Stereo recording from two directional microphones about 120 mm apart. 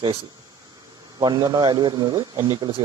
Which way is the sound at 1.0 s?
30° right (ahead or behind).